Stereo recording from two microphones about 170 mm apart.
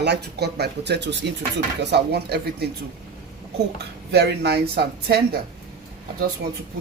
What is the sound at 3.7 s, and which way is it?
Speech, 75° right (ahead or behind).